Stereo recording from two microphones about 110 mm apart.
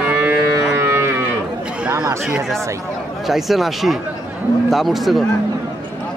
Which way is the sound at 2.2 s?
Centre (ahead or behind).